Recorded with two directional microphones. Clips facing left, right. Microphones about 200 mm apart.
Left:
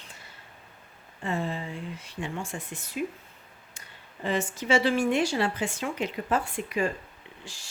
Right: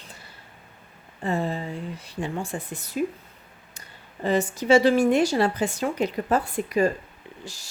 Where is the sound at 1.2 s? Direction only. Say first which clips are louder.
Right 4 dB; 40° right (ahead or behind).